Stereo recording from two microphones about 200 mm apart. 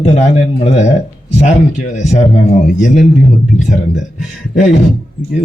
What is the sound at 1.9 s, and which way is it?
A man's voice, 35° left (ahead or behind).